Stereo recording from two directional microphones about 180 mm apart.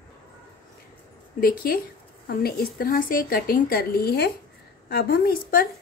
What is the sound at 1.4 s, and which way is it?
Speech, 55° left (ahead or behind).